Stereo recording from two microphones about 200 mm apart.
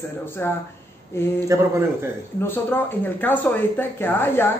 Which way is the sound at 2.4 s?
10° left (ahead or behind).